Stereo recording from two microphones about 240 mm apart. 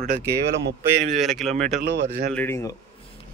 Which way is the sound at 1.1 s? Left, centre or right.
Centre.